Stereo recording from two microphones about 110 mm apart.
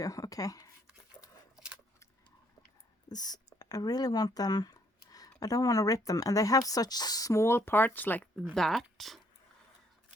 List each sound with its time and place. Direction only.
0.0 s speech: 30° left (ahead or behind)
1.5 s keys jangling: 10° right (ahead or behind)
3.1 s a sound: 35° left (ahead or behind)
5.4 s speech: 35° left (ahead or behind); by 8.3 s 15° left (ahead or behind)
8.5 s speech: centre (ahead or behind)